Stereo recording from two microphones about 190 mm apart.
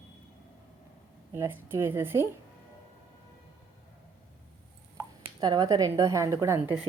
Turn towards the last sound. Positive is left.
turn(degrees=-15)  # may be behind; listen again after turning